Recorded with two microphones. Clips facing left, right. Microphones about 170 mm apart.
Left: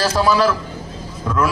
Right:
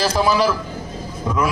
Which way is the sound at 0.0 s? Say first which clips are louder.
Left 1 dB; 15° right (ahead or behind).